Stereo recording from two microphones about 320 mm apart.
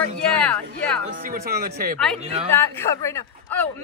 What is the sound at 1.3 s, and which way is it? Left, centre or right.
Speech, right.